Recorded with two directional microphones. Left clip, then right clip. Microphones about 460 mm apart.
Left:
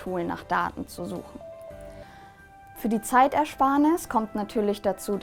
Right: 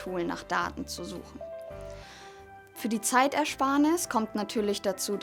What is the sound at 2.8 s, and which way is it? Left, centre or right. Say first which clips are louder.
Speech: left 5 dB; centre.